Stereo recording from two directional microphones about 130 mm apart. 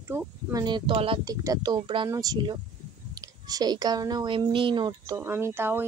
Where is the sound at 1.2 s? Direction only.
30° right (ahead or behind).